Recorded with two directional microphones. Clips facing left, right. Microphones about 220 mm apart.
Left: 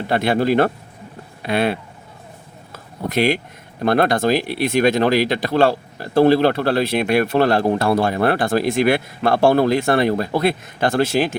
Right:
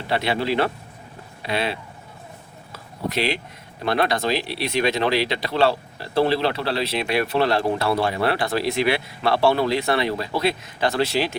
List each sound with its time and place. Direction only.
0.1 s speech: 50° left (ahead or behind)